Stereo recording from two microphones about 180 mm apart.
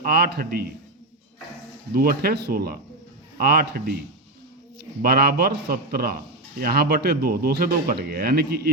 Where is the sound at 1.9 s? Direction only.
55° right (ahead or behind).